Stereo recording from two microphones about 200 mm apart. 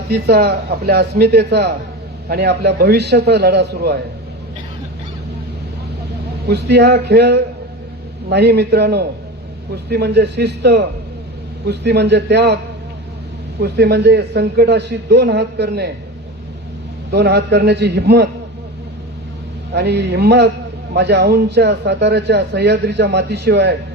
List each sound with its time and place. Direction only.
0.1 s a man's voice: 50° right (ahead or behind)
6.5 s speech: 55° right (ahead or behind)
13.6 s speech: 55° right (ahead or behind)
17.1 s speech: 55° right (ahead or behind)
19.7 s speech: 55° right (ahead or behind)